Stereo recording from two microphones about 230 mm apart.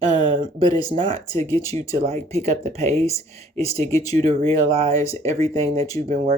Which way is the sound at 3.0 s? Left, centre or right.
Centre.